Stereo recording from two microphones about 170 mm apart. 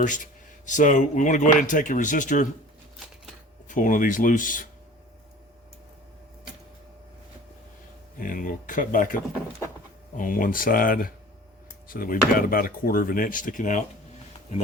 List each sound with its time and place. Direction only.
0.6 s speech: 50° left (ahead or behind)
3.7 s speech: 50° left (ahead or behind)
8.2 s speech: 55° left (ahead or behind)